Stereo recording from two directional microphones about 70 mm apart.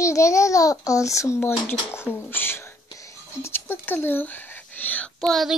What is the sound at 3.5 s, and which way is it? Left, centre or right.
Speech, left.